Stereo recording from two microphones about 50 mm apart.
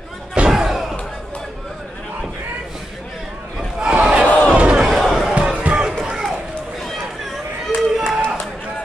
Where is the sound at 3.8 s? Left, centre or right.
Centre.